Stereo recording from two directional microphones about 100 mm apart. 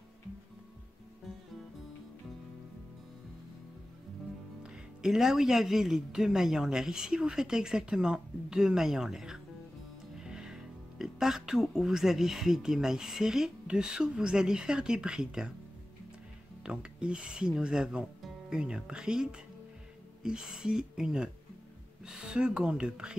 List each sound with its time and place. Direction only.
4.6 s speech: 5° right (ahead or behind)
16.6 s speech: 10° right (ahead or behind)